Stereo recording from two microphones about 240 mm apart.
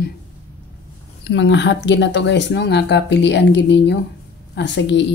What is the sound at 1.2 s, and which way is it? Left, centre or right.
Speech, left.